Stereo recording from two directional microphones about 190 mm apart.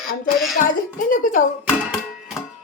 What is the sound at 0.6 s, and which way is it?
Speech, 45° left (ahead or behind).